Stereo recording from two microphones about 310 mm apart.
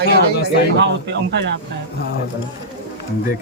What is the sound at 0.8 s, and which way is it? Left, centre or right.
Speech, right.